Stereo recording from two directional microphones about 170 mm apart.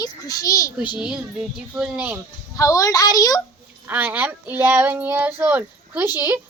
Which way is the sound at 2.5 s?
20° left (ahead or behind).